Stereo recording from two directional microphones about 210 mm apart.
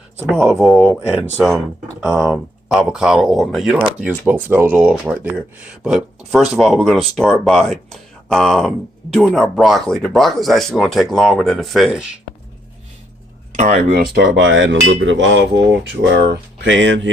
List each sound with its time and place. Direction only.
0.3 s speech: 5° right (ahead or behind)
13.6 s speech: 35° right (ahead or behind)
14.1 s speech: 60° right (ahead or behind)